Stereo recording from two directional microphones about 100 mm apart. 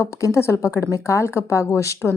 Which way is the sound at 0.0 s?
30° left (ahead or behind).